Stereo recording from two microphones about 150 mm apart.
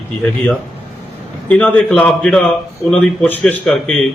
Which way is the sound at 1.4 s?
5° left (ahead or behind).